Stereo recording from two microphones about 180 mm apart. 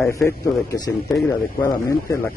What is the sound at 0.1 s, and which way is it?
Speech, 15° left (ahead or behind).